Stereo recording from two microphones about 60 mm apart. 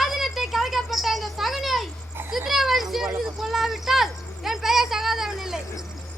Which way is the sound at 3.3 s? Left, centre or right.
Centre.